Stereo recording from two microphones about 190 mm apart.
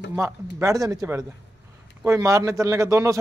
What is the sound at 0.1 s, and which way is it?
Speech, 15° right (ahead or behind).